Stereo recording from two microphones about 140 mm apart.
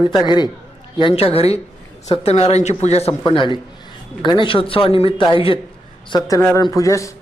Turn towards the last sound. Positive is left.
turn(degrees=20)  # may be behind; listen again after turning